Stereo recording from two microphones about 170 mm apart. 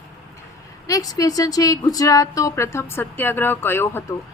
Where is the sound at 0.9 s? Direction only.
20° left (ahead or behind).